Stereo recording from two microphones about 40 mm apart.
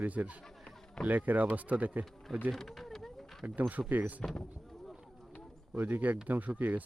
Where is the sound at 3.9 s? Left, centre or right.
Right.